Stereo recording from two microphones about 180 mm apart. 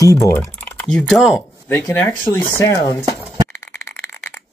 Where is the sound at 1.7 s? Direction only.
10° left (ahead or behind).